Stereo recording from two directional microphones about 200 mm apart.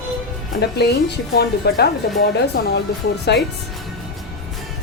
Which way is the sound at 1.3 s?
55° left (ahead or behind).